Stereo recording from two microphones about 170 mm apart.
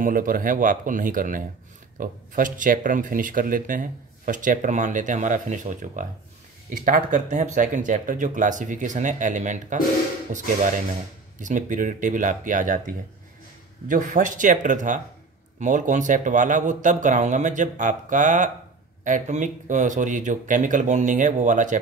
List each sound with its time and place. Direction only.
0.0 s speech: 55° right (ahead or behind)
11.3 s speech: 50° right (ahead or behind)